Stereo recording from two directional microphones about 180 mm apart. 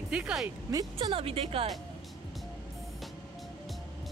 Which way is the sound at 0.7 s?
20° right (ahead or behind).